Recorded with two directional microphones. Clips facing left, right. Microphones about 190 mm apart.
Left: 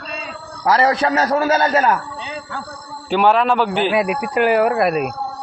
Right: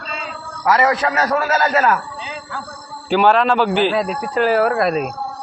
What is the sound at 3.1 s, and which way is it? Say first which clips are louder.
Speech: right 1 dB; 5° left (ahead or behind).